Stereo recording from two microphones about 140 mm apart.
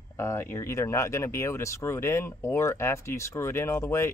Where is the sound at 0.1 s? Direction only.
20° left (ahead or behind).